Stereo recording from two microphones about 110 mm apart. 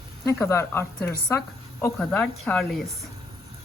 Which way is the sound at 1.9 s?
10° left (ahead or behind).